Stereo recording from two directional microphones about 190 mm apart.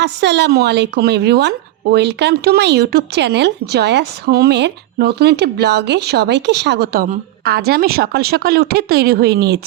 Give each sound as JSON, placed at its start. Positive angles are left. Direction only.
{"t": 0.0, "sound": "a woman's voice", "side_deg": -65}